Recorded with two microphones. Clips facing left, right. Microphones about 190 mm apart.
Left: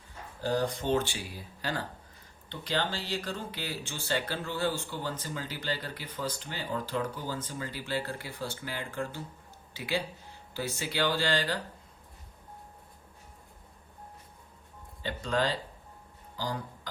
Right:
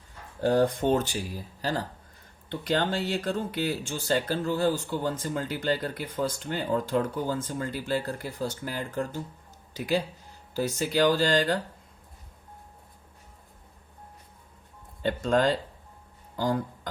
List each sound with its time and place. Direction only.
0.4 s speech: 55° right (ahead or behind)
1.1 s speech: 40° right (ahead or behind)
2.5 s speech: 50° right (ahead or behind)
15.0 s speech: 50° right (ahead or behind)